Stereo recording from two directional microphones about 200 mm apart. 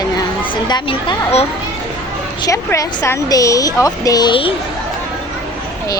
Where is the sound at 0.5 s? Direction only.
25° left (ahead or behind).